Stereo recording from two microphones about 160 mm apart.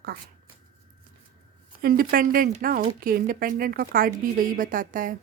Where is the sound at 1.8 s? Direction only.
65° right (ahead or behind).